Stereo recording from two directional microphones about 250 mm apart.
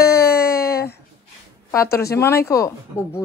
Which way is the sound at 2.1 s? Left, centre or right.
Centre.